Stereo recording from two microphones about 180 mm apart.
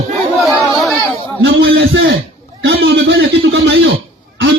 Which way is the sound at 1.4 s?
90° right.